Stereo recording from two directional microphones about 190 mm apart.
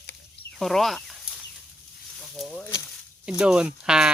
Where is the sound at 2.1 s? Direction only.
Centre (ahead or behind).